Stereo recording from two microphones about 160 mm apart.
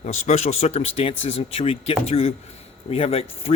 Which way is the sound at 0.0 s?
45° left (ahead or behind).